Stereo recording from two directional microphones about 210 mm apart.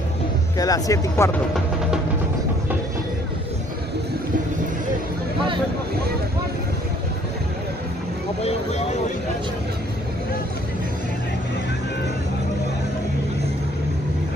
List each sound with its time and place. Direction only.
0.6 s speech: 15° left (ahead or behind)
8.4 s speech: 30° left (ahead or behind)